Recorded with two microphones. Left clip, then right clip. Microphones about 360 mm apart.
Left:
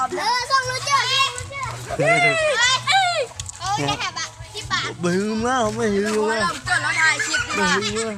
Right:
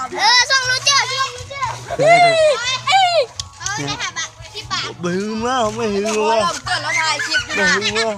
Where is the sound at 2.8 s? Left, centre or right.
Centre.